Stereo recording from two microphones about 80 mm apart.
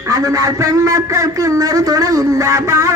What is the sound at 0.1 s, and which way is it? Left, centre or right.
A man's voice, right.